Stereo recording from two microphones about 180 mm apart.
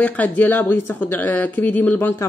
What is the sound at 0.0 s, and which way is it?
A woman's voice, 10° left (ahead or behind).